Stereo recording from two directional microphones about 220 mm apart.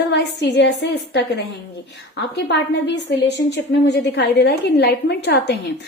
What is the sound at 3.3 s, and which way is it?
A woman's voice, 50° left (ahead or behind).